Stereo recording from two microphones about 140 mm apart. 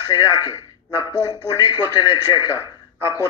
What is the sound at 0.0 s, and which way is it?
Speech, 25° left (ahead or behind).